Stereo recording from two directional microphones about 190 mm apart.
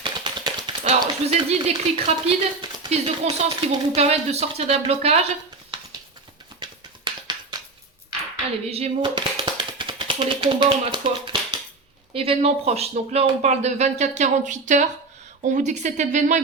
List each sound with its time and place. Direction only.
0.0 s tap: 25° right (ahead or behind)
2.2 s speech: 35° right (ahead or behind)
6.6 s music: 25° right (ahead or behind)
8.7 s speech: 30° right (ahead or behind)